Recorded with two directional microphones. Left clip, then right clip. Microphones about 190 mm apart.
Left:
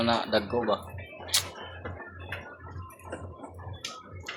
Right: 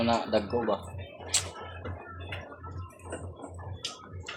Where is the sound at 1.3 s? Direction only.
5° left (ahead or behind).